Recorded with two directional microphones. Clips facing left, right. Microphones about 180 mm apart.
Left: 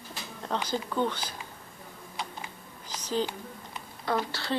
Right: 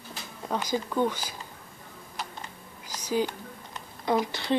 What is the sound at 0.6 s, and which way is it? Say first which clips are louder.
Speech: right 3 dB; 10° right (ahead or behind).